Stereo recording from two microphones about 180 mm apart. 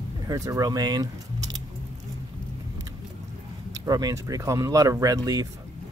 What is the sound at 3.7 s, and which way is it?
Speech, 20° right (ahead or behind).